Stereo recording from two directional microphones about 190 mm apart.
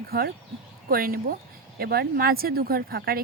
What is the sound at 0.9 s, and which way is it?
Speech, 50° right (ahead or behind).